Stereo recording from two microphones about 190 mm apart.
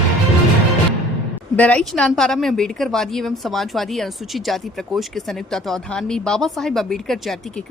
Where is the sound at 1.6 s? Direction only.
5° left (ahead or behind).